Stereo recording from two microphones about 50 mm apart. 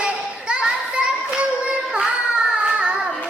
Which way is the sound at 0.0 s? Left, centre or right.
Centre.